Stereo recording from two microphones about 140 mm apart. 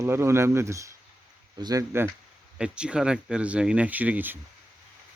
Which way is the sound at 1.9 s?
15° right (ahead or behind).